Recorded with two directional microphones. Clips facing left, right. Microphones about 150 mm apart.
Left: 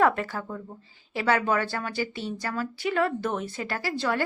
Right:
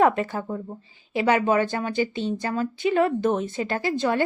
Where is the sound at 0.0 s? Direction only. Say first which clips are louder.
Right 3 dB; 20° right (ahead or behind).